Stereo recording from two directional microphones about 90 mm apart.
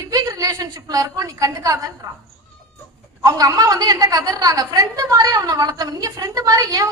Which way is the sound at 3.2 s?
40° right (ahead or behind).